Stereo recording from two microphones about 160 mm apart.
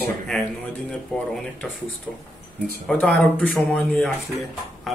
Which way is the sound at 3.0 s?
10° left (ahead or behind).